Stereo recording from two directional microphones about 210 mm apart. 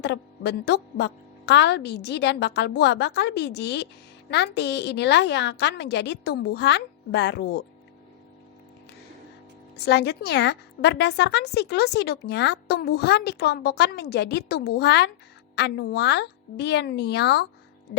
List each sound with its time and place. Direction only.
0.0 s a woman's voice: 55° left (ahead or behind)
9.7 s a woman's voice: 50° left (ahead or behind)